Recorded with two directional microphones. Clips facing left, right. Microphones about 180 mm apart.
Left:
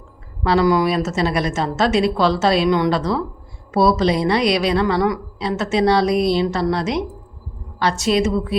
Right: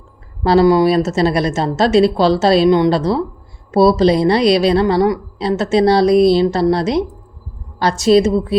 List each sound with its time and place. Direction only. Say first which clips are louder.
0.4 s a woman's voice: right 5 dB; 30° right (ahead or behind)